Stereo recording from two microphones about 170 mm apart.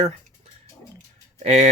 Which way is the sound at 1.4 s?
40° right (ahead or behind).